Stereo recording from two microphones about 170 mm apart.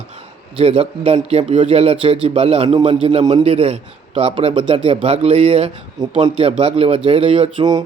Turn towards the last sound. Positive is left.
turn(degrees=-25)  # may be behind; listen again after turning